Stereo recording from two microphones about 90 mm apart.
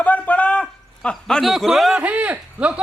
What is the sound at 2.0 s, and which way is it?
Speech, 15° right (ahead or behind).